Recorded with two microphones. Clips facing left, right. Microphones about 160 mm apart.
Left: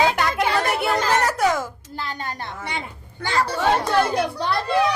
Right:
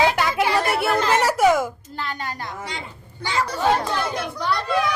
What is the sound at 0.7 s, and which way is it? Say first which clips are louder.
Music: right 1 dB; centre (ahead or behind).